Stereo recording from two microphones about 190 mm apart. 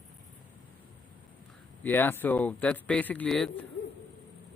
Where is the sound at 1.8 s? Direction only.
10° left (ahead or behind).